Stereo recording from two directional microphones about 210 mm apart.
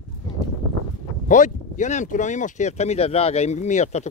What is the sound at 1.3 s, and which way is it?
Speech, 35° left (ahead or behind).